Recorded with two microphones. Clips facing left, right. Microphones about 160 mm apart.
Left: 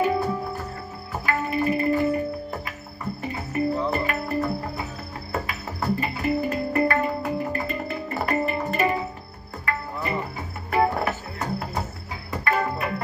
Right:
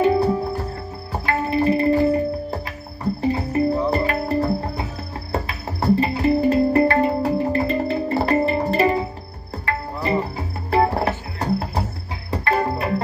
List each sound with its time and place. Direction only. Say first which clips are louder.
0.0 s music: right 6 dB; 30° right (ahead or behind)